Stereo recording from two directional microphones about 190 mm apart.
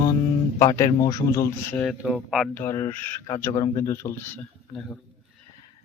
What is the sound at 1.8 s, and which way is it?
Speech, centre (ahead or behind).